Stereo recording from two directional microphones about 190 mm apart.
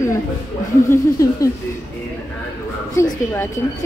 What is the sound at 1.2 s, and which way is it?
Speech, 20° left (ahead or behind).